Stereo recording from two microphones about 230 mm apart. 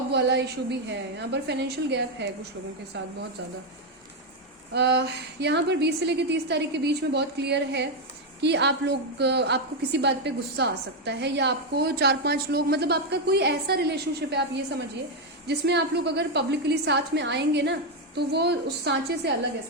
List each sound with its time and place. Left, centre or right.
0.1 s a woman's voice: right
4.7 s a woman's voice: right
15.4 s a woman's voice: right